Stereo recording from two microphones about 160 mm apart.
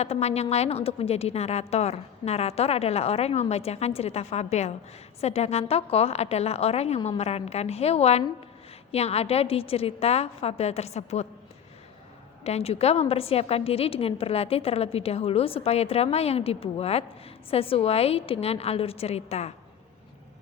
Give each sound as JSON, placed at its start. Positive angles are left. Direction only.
{"t": 0.0, "sound": "a woman's voice", "side_deg": 40}
{"t": 12.5, "sound": "a woman's voice", "side_deg": 40}